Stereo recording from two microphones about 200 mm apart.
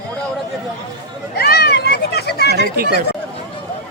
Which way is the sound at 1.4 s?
55° left (ahead or behind).